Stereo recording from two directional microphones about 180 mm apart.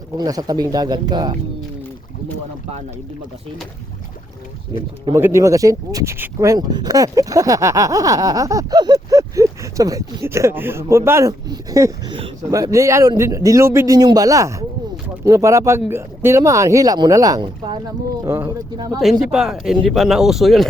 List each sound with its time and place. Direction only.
0.2 s speech: 20° right (ahead or behind)
5.1 s speech: 15° right (ahead or behind)
19.2 s speech: 5° right (ahead or behind)